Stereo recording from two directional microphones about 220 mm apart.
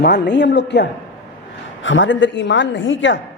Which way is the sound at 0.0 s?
50° left (ahead or behind).